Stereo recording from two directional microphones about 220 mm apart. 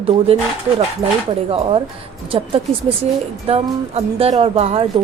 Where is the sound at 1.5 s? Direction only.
25° right (ahead or behind).